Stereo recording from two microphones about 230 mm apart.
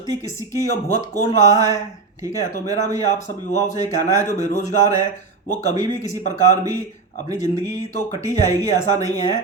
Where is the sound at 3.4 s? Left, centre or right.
Left.